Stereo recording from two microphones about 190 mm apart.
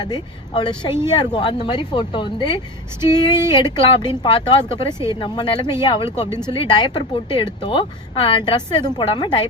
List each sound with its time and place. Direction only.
0.0 s speech: 25° left (ahead or behind)